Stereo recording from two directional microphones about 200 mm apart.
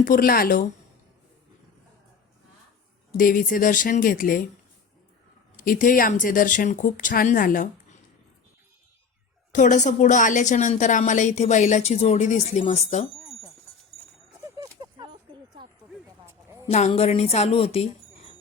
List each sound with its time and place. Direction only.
0.0 s speech: 45° left (ahead or behind)
3.2 s speech: 45° left (ahead or behind)
5.5 s speech: 45° left (ahead or behind)
9.5 s a woman's voice: 40° left (ahead or behind)
14.4 s a sound: 20° right (ahead or behind)
16.6 s a woman's voice: 35° left (ahead or behind)